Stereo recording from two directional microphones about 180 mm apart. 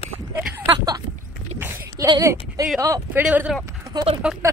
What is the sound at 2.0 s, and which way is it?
Speech, 20° right (ahead or behind).